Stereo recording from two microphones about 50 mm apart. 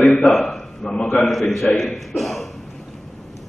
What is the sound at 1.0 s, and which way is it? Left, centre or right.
Speech, left.